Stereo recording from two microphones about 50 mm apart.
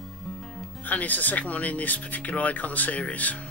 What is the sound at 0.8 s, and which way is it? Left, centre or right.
Speech, left.